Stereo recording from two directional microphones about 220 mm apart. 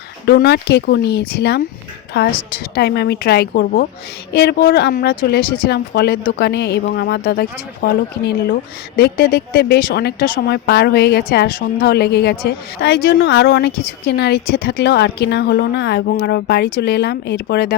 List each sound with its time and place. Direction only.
0.3 s speech: 45° left (ahead or behind)